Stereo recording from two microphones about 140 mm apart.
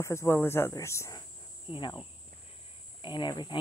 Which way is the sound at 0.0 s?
20° left (ahead or behind).